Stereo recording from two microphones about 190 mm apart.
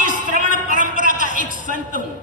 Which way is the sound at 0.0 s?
45° right (ahead or behind).